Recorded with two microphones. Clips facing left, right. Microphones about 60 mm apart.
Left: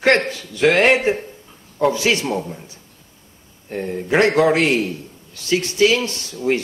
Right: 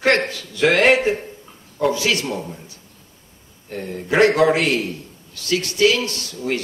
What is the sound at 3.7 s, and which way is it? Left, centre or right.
Speech, left.